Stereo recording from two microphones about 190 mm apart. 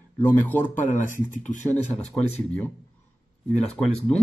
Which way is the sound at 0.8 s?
45° left (ahead or behind).